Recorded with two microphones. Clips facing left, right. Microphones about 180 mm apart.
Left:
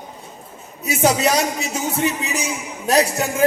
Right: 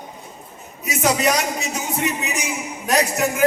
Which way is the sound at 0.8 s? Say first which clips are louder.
Left 2 dB; 30° left (ahead or behind).